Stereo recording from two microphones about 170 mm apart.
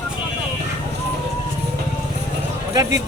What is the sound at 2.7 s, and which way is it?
Speech, 20° right (ahead or behind).